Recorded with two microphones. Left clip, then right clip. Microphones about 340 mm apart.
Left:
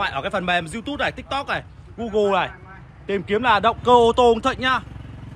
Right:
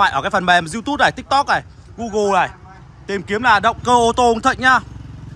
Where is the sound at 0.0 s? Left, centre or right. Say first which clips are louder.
Right 8 dB; centre.